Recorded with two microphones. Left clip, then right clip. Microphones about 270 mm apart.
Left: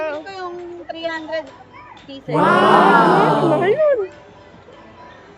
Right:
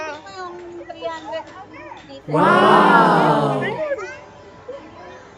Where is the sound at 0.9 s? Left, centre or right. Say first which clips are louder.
Left 3 dB; left.